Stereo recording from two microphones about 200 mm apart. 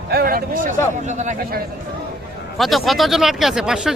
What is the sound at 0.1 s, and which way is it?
A man's voice, 50° right (ahead or behind).